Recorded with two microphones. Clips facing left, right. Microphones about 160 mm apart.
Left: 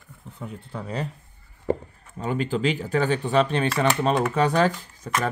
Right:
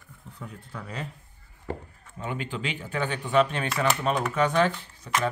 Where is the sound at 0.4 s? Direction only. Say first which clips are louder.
Left 5 dB; 25° left (ahead or behind).